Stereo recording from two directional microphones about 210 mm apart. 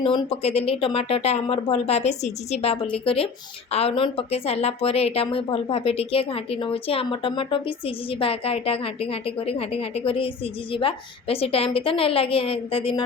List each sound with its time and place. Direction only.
0.0 s a woman's voice: 25° left (ahead or behind)